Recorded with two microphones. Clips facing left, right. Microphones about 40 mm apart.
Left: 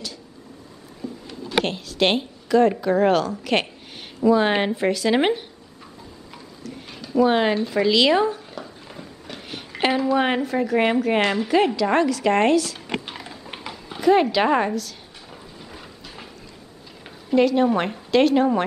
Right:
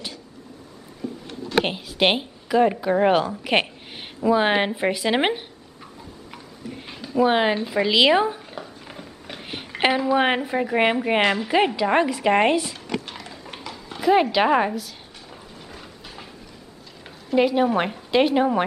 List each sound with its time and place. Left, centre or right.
1.6 s speech: centre
7.2 s a woman's voice: centre
13.0 s a sound: centre
13.5 s horse: centre
14.0 s speech: centre
15.2 s vehicle: centre
17.4 s speech: centre